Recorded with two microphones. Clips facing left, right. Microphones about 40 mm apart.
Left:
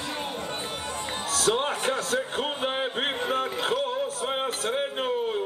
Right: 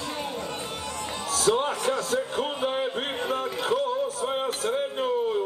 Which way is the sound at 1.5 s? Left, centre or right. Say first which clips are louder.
Right 1 dB; left.